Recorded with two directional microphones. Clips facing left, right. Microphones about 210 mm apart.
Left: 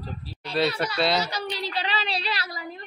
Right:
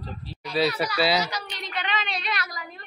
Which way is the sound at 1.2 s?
30° left (ahead or behind).